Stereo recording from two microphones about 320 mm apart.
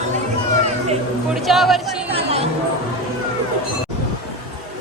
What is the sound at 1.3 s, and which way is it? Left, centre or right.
Speech, centre.